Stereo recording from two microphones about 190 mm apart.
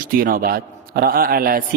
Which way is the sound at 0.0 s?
50° right (ahead or behind).